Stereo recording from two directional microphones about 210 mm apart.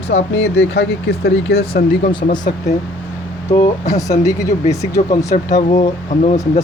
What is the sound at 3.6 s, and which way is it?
Speech, 35° left (ahead or behind).